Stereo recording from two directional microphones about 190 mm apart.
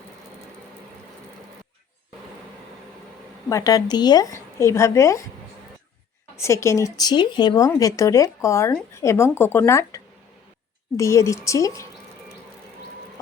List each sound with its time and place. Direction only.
3.5 s speech: 20° left (ahead or behind)
6.3 s speech: 15° left (ahead or behind)